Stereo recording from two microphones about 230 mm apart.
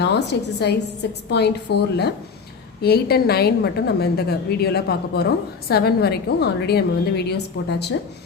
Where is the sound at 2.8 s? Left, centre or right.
Left.